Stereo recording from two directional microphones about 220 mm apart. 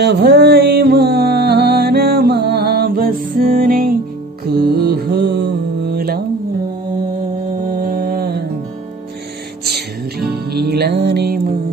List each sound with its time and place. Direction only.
0.0 s music: 50° right (ahead or behind)
4.5 s mantra: 45° right (ahead or behind)
5.9 s music: 45° right (ahead or behind)
7.7 s mantra: 40° right (ahead or behind)
9.8 s music: 45° right (ahead or behind)